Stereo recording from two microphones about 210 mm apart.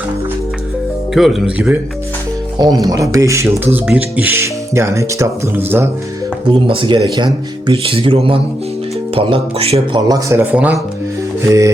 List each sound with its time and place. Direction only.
1.1 s speech: centre (ahead or behind)
2.6 s speech: 20° right (ahead or behind)
6.5 s speech: 25° right (ahead or behind)